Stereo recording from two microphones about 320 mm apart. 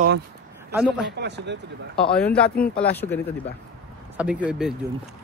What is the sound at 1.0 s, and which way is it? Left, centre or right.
Speech, right.